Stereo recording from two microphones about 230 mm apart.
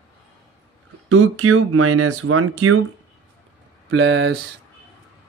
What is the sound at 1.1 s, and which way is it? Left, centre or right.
Speech, right.